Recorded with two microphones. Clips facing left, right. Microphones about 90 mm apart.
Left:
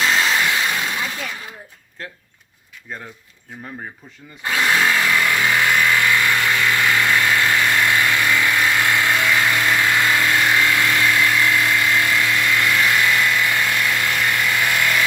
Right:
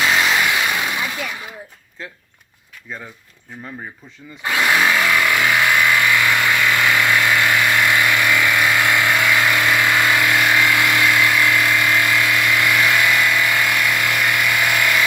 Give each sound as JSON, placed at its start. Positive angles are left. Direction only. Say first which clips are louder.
{"t": 0.0, "sound": "vehicle", "louder": "right 1 dB", "side_deg": -15}
{"t": 4.4, "sound": "power tool", "louder": "right 1 dB", "side_deg": -20}
{"t": 8.4, "sound": "vehicle", "louder": "right 1 dB", "side_deg": -20}
{"t": 11.6, "sound": "a sound", "louder": "right 1 dB", "side_deg": -20}